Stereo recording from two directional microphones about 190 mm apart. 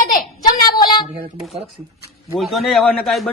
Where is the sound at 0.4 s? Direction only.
25° left (ahead or behind).